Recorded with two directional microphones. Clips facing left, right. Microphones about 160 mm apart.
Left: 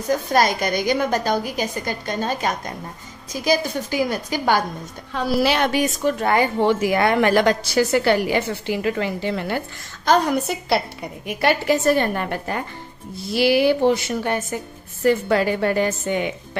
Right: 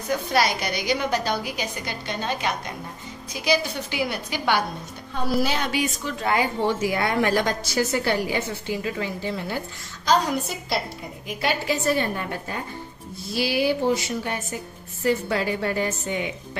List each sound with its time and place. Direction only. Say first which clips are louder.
0.1 s a woman's voice: left 4 dB; 45° left (ahead or behind)
5.1 s a woman's voice: left 4 dB; 90° left
5.7 s a woman's voice: left 6 dB; 50° left (ahead or behind)
6.7 s a woman's voice: left 5 dB; 65° left (ahead or behind)